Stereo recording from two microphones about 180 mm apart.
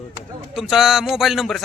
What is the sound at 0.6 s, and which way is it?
Speech, centre (ahead or behind).